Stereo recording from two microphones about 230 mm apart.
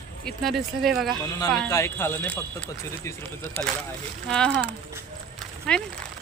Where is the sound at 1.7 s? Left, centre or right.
Centre.